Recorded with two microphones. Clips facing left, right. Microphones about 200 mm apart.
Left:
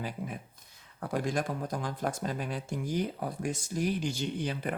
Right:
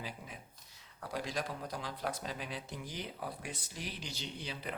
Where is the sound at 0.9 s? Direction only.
50° left (ahead or behind).